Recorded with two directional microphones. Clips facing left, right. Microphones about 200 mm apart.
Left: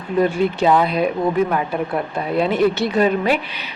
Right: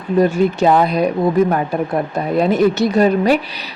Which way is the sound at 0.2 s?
45° right (ahead or behind).